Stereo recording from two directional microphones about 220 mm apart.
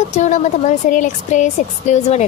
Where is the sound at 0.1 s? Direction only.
30° left (ahead or behind).